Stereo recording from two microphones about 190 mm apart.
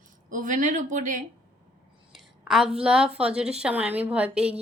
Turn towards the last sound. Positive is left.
turn(degrees=-5)  # may be behind; listen again after turning